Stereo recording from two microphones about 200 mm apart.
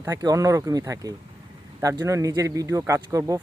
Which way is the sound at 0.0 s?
15° right (ahead or behind).